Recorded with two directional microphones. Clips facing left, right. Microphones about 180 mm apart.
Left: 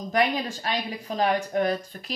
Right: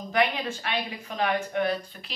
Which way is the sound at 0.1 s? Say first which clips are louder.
Left 1 dB; 35° left (ahead or behind).